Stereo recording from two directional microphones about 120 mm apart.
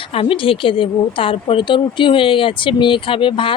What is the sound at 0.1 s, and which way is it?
Speech, 50° left (ahead or behind).